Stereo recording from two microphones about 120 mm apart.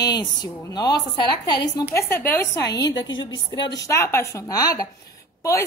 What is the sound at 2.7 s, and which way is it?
A woman's voice, 35° left (ahead or behind).